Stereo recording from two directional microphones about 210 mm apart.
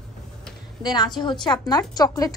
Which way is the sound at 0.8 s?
20° left (ahead or behind).